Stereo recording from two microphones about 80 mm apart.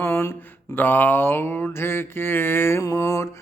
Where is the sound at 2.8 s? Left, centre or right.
Left.